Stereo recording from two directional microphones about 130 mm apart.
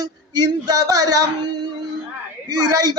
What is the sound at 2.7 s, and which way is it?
Speech, 30° right (ahead or behind).